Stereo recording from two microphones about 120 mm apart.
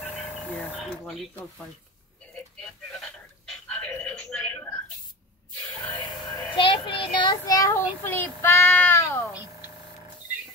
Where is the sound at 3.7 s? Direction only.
10° left (ahead or behind).